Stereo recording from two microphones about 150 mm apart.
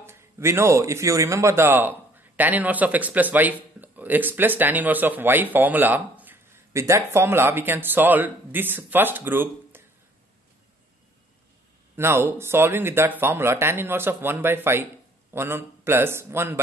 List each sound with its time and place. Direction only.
0.0 s a man's voice: 15° right (ahead or behind)
12.0 s speech: 15° right (ahead or behind)